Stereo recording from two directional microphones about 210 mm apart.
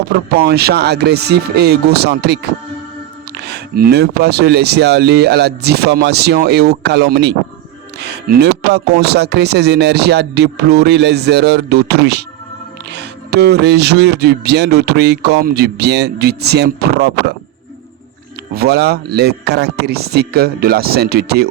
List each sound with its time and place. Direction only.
0.1 s speech: 50° right (ahead or behind)
18.5 s speech: 50° right (ahead or behind)